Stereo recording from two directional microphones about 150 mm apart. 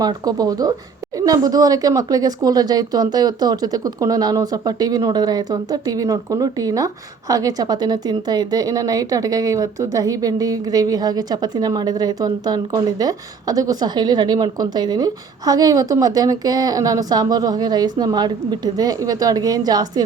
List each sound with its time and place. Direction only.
0.0 s speech: 25° right (ahead or behind)